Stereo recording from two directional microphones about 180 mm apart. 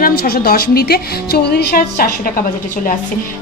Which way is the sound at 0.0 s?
60° left (ahead or behind).